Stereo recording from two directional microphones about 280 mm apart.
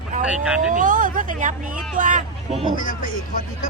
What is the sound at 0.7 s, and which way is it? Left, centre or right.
Speech, right.